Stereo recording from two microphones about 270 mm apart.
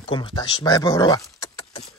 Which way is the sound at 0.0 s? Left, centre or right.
Centre.